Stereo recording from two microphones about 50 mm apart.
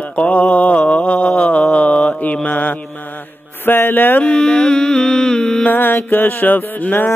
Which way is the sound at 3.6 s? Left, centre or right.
Left.